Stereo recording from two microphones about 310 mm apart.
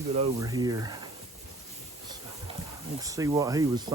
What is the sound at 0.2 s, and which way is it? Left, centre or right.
Speech, centre.